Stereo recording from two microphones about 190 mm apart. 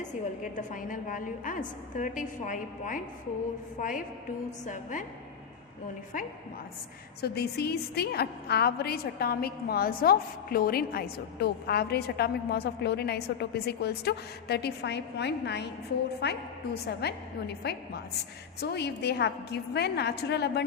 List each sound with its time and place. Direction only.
0.0 s a woman's voice: 40° left (ahead or behind)
7.2 s a woman's voice: 55° left (ahead or behind)